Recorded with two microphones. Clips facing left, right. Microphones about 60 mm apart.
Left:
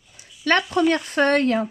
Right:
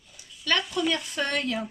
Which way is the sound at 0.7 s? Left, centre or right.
Left.